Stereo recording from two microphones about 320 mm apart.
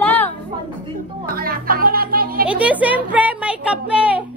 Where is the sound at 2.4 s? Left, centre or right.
Centre.